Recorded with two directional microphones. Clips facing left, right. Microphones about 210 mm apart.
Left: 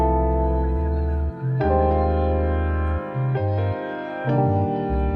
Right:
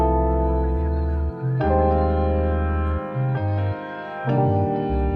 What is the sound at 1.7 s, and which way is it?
Music, 5° left (ahead or behind).